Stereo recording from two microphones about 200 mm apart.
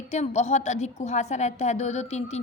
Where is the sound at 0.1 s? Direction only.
35° left (ahead or behind).